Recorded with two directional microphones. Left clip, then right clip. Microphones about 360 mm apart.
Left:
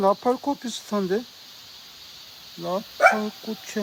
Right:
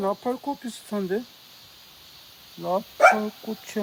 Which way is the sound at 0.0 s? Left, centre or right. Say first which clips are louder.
Left 6 dB; centre.